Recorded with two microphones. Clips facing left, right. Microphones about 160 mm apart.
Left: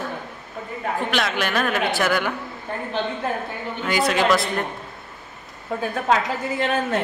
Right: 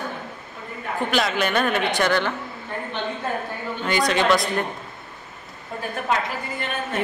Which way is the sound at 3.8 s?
5° left (ahead or behind).